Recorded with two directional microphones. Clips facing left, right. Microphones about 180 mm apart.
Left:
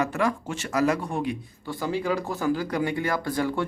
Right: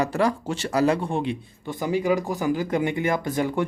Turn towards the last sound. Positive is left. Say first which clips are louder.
# right 2 dB
turn(degrees=-20)  # may be behind; listen again after turning